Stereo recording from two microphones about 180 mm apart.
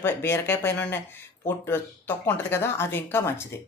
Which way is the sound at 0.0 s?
15° left (ahead or behind).